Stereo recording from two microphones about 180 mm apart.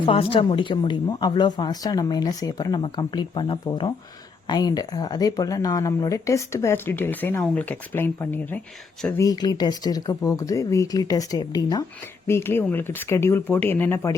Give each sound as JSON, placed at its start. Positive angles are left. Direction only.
{"t": 0.0, "sound": "speech", "side_deg": 30}
{"t": 9.1, "sound": "speech", "side_deg": 20}